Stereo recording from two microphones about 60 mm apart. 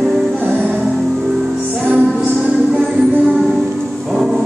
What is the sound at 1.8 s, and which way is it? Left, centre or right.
Music, right.